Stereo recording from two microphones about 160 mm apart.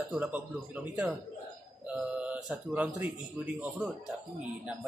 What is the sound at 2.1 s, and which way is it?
Speech, 5° right (ahead or behind).